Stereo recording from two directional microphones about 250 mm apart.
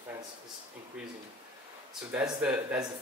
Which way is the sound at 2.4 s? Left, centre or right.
Centre.